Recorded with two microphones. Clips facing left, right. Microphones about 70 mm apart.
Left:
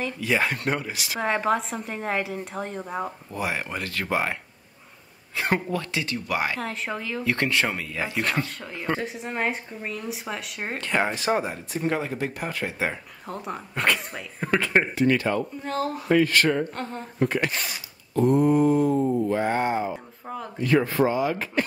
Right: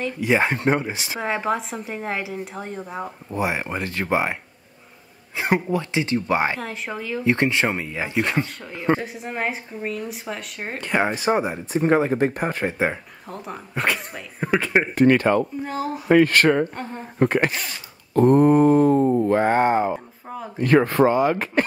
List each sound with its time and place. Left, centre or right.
0.2 s speech: right
1.2 s speech: centre
3.3 s speech: right
6.6 s speech: centre
7.2 s speech: right
8.9 s speech: centre
10.8 s speech: centre
11.8 s speech: right
13.3 s speech: centre
15.0 s a sound: right
15.6 s speech: centre
16.1 s a sound: right